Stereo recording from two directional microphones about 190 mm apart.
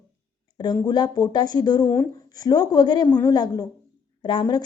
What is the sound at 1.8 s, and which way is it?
Speech, 10° left (ahead or behind).